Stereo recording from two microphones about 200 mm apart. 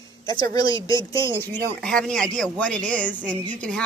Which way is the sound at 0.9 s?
15° left (ahead or behind).